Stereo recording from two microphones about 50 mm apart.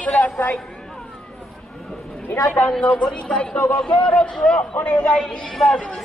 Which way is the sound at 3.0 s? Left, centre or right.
Centre.